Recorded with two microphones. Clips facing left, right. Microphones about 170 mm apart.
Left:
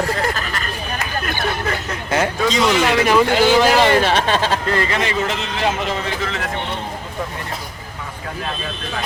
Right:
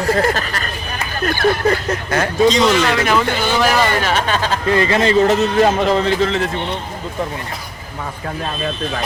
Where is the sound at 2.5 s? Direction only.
10° left (ahead or behind).